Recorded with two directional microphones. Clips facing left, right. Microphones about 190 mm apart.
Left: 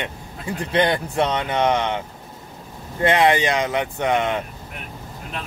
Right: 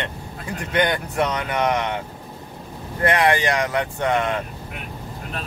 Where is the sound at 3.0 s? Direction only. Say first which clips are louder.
Left 2 dB; 25° left (ahead or behind).